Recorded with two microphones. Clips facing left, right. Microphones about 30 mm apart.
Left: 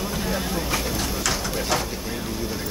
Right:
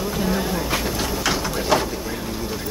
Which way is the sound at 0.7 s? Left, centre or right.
Centre.